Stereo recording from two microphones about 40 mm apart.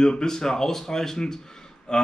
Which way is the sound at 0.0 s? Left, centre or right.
Centre.